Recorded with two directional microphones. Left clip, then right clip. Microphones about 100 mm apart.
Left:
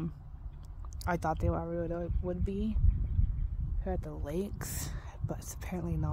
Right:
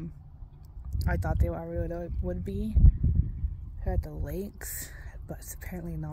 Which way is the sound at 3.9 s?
15° left (ahead or behind).